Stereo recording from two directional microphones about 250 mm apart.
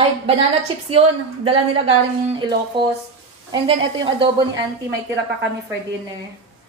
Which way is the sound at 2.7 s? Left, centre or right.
Centre.